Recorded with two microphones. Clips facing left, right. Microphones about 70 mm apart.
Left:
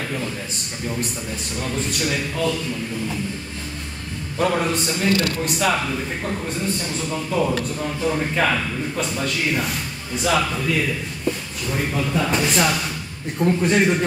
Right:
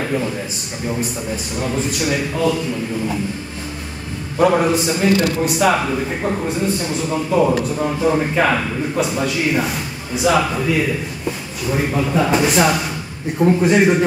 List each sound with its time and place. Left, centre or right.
0.0 s a sound: centre
1.6 s a man's voice: centre
4.4 s a man's voice: centre
6.4 s a man's voice: centre